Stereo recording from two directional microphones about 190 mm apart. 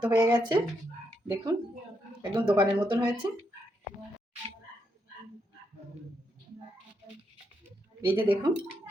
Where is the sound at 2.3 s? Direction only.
25° right (ahead or behind).